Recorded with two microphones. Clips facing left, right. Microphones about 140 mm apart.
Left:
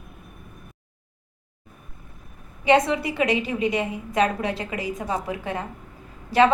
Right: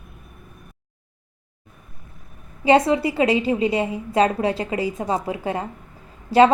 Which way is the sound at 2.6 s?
30° right (ahead or behind).